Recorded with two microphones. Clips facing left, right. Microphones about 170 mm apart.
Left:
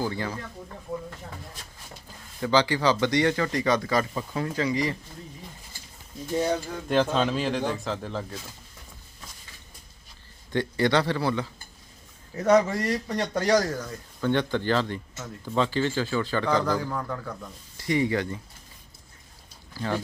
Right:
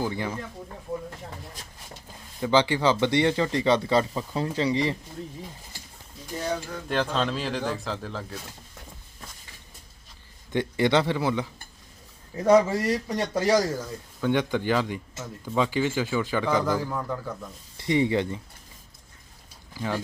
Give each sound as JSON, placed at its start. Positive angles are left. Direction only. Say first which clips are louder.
{"t": 0.0, "sound": "speech", "louder": "right 1 dB", "side_deg": -15}
{"t": 2.4, "sound": "speech", "louder": "right 1 dB", "side_deg": -20}
{"t": 6.8, "sound": "speech", "louder": "left 3 dB", "side_deg": 0}
{"t": 10.5, "sound": "speech", "louder": "right 1 dB", "side_deg": -20}
{"t": 17.7, "sound": "speech", "louder": "right 2 dB", "side_deg": -25}
{"t": 19.7, "sound": "speech", "louder": "left 1 dB", "side_deg": -10}